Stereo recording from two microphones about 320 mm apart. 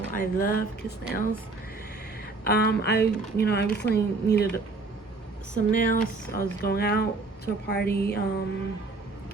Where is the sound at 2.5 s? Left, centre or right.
Left.